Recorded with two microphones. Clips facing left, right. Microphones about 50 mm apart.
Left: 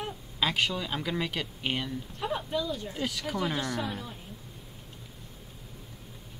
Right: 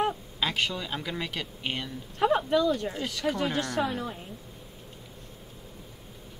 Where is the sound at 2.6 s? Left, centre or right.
Right.